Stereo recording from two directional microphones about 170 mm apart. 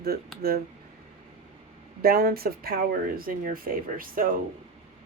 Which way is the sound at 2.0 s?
60° right (ahead or behind).